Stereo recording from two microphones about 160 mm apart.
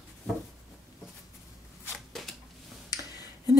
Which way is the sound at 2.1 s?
Centre (ahead or behind).